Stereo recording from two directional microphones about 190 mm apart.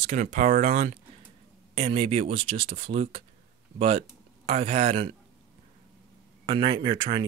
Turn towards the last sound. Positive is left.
turn(degrees=-25)  # may be behind; listen again after turning